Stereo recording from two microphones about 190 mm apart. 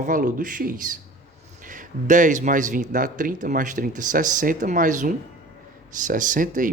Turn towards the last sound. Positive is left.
turn(degrees=-45)  # may be behind; listen again after turning